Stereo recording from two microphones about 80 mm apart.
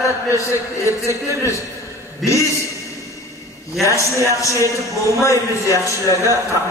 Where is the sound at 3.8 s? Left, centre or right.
Left.